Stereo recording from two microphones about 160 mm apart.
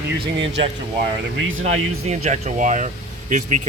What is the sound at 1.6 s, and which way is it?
Speech, 45° right (ahead or behind).